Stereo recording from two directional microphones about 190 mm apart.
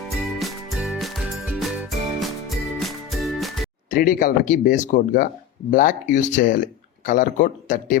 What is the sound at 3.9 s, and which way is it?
Speech, 50° left (ahead or behind).